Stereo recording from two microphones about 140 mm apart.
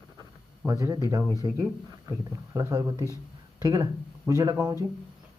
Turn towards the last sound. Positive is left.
turn(degrees=-25)  # may be behind; listen again after turning